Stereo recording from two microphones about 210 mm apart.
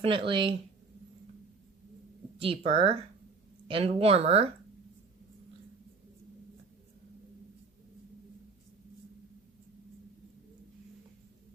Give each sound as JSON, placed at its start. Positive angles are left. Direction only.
{"t": 0.0, "sound": "speech", "side_deg": -25}
{"t": 2.4, "sound": "speech", "side_deg": -25}